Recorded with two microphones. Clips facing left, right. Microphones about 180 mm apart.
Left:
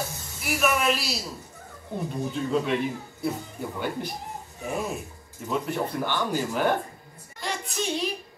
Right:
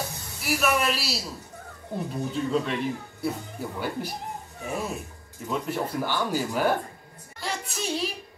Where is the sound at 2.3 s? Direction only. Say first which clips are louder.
Left 1 dB; centre (ahead or behind).